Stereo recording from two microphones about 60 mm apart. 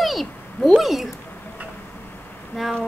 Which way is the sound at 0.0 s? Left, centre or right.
Centre.